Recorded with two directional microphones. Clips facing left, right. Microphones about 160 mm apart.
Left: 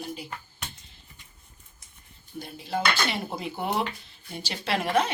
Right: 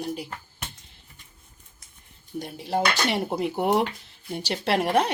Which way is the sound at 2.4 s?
70° right (ahead or behind).